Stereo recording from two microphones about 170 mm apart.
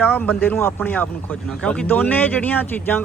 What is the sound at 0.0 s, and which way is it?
Speech, 10° left (ahead or behind).